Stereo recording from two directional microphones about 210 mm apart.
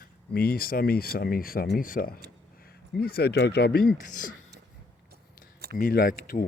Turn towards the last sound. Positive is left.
turn(degrees=45)  # may be behind; listen again after turning